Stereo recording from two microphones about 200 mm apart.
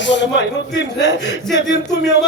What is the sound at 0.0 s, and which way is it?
Speech, 60° left (ahead or behind).